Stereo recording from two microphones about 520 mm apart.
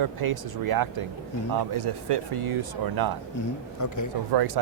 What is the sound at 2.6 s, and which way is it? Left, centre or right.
Speech, right.